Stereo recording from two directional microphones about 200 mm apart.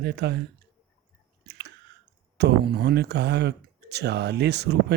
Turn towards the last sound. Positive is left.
turn(degrees=-55)  # may be behind; listen again after turning